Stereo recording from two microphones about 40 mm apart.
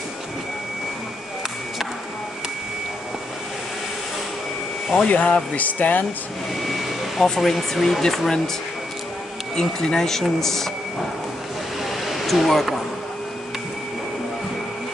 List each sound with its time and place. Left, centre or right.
4.9 s speech: left
6.6 s vehicle: centre
7.3 s speech: centre
9.6 s speech: centre
11.8 s a sound: centre